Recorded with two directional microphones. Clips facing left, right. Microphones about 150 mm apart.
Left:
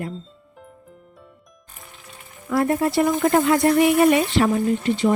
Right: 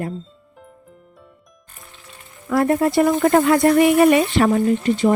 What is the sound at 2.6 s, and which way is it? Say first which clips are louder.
Speech: right 3 dB; 90° right.